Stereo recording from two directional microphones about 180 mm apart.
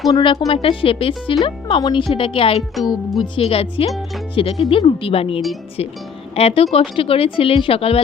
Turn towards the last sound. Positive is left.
turn(degrees=30)  # may be behind; listen again after turning